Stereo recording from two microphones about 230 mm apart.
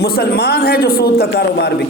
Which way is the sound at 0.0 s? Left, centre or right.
Left.